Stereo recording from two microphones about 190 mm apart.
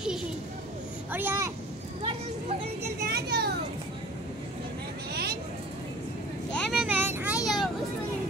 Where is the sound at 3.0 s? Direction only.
55° right (ahead or behind).